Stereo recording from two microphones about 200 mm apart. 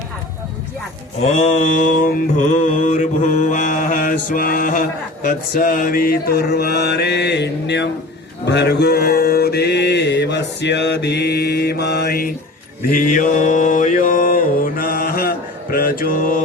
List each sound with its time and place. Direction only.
1.2 s mantra: 35° left (ahead or behind)